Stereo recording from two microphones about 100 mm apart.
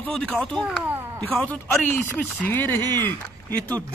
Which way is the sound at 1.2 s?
15° left (ahead or behind).